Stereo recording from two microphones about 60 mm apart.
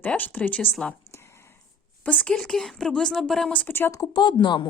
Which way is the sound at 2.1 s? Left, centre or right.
Centre.